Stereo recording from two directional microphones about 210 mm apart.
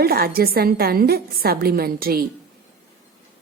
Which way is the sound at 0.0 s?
45° right (ahead or behind).